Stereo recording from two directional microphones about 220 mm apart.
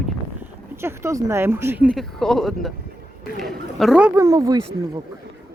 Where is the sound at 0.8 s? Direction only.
10° right (ahead or behind).